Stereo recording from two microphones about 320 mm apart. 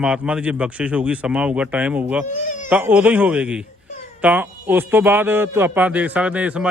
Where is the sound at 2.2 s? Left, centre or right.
Left.